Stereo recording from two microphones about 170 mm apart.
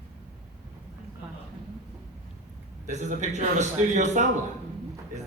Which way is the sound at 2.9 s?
45° right (ahead or behind).